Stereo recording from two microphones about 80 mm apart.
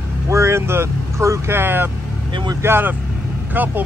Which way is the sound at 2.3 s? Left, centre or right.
Right.